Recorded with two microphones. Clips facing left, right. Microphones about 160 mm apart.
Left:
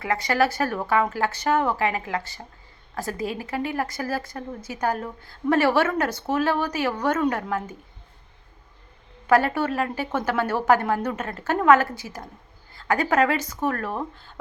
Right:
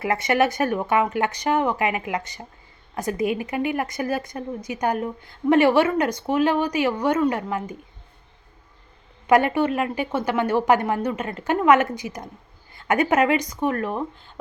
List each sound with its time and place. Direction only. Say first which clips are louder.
0.0 s a woman's voice: right 2 dB; 25° right (ahead or behind)
9.5 s speech: right 3 dB; 15° right (ahead or behind)